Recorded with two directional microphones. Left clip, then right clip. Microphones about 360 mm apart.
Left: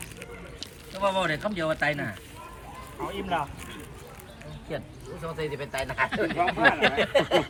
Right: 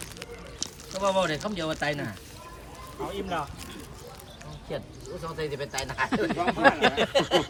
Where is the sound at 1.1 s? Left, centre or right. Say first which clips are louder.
Even; centre.